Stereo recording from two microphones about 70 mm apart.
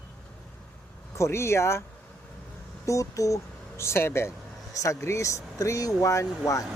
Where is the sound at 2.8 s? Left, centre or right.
Left.